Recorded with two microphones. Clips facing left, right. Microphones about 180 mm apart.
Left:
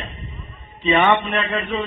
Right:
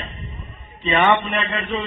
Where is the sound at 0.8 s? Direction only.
5° left (ahead or behind).